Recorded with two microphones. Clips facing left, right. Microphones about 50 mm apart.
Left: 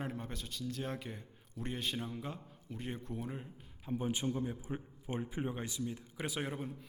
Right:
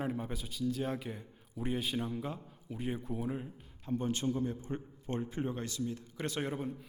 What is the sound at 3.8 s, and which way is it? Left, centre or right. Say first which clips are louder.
A man's voice: right 2 dB; centre.